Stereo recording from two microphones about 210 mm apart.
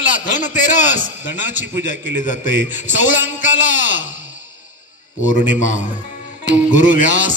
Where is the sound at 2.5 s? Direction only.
60° right (ahead or behind).